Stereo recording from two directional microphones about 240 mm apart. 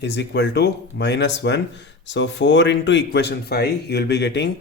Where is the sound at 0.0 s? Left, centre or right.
Left.